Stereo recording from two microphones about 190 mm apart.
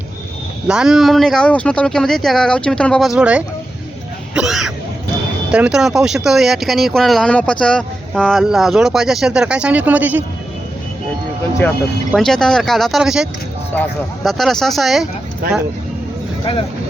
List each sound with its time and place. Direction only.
0.7 s speech: 5° right (ahead or behind)
12.1 s speech: centre (ahead or behind)
13.7 s speech: 10° left (ahead or behind)
16.4 s speech: 25° left (ahead or behind)